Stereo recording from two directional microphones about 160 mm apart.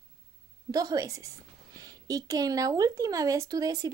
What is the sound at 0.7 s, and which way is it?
Speech, 20° right (ahead or behind).